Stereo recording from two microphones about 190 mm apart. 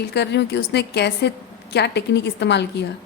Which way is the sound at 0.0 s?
60° left (ahead or behind).